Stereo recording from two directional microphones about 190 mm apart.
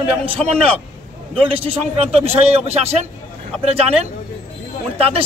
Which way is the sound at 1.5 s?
30° right (ahead or behind).